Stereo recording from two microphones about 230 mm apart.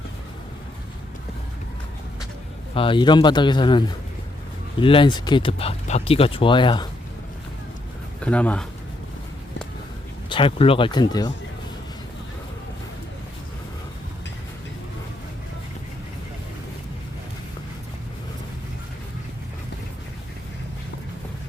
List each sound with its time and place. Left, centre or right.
2.7 s speech: left
8.2 s speech: centre
10.2 s speech: left